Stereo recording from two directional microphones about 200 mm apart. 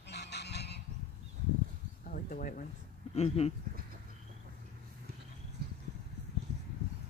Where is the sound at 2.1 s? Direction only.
45° left (ahead or behind).